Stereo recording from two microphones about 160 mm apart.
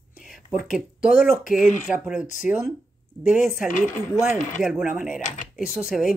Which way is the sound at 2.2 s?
50° left (ahead or behind).